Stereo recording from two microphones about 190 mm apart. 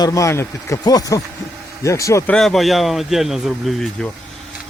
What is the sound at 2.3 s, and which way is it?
Speech, centre (ahead or behind).